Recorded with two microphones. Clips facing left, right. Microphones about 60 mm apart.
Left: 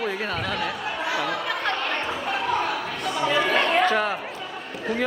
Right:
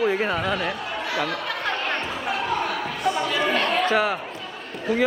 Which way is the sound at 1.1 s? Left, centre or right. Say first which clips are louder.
Right 1 dB; centre.